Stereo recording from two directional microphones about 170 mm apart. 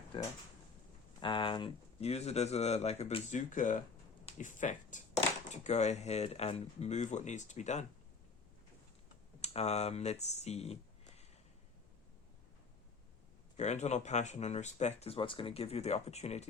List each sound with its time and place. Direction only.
0.1 s speech: 30° left (ahead or behind)
3.3 s speech: 45° left (ahead or behind)
9.4 s speech: 40° left (ahead or behind)
13.6 s speech: 40° left (ahead or behind)